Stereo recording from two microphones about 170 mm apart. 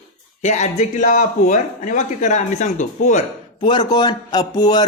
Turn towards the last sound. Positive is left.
turn(degrees=25)  # may be behind; listen again after turning